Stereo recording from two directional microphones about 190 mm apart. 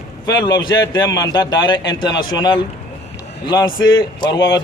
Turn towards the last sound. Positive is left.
turn(degrees=20)  # may be behind; listen again after turning